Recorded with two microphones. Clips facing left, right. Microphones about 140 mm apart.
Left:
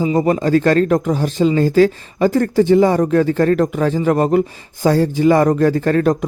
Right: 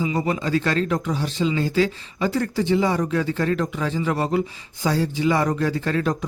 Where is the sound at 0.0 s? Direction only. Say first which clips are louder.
Left 8 dB; 45° left (ahead or behind).